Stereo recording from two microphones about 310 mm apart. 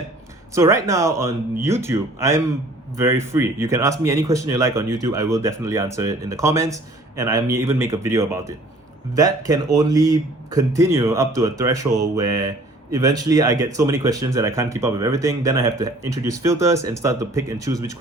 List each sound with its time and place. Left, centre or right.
0.5 s speech: centre